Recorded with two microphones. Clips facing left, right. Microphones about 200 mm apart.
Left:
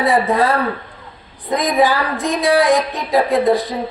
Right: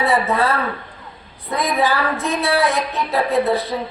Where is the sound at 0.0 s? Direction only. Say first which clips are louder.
Left 3 dB; 15° left (ahead or behind).